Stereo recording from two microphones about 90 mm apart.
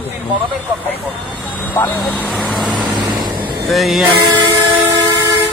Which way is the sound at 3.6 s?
Centre (ahead or behind).